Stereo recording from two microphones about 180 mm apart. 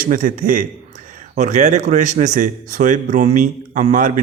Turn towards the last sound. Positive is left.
turn(degrees=-45)  # may be behind; listen again after turning